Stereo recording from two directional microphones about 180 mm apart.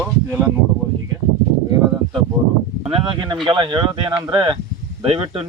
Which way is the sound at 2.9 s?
25° right (ahead or behind).